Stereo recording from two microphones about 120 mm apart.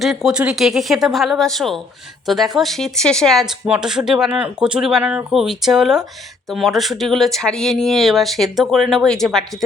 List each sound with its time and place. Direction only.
0.0 s speech: centre (ahead or behind)